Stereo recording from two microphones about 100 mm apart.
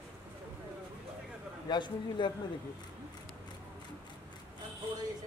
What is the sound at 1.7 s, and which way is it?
Speech, 50° left (ahead or behind).